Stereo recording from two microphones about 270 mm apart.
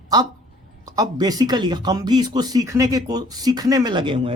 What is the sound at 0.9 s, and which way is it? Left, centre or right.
Speech, centre.